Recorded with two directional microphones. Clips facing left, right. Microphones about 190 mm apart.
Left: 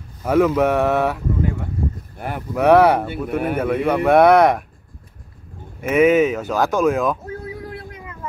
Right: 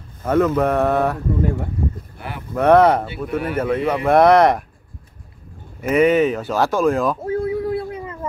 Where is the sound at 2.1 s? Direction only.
50° left (ahead or behind).